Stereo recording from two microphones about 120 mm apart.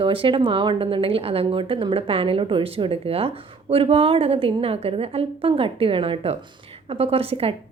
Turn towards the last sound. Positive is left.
turn(degrees=-55)  # may be behind; listen again after turning